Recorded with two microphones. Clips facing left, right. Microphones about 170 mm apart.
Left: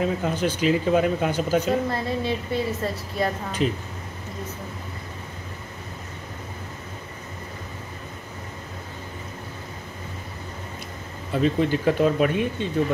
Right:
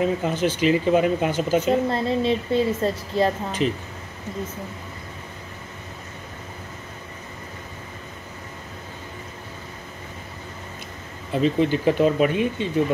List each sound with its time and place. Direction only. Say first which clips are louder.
0.0 s speech: right 2 dB; 5° right (ahead or behind)
1.9 s a woman's voice: right 4 dB; 25° right (ahead or behind)
3.6 s speech: right 1 dB; centre (ahead or behind)
11.3 s speech: right 1 dB; centre (ahead or behind)